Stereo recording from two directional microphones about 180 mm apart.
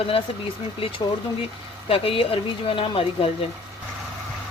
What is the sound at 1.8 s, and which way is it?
Speech, 30° left (ahead or behind).